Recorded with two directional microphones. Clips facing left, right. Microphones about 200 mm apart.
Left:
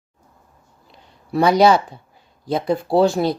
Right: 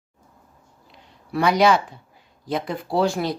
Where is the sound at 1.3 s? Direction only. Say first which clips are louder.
Left 4 dB; 30° left (ahead or behind).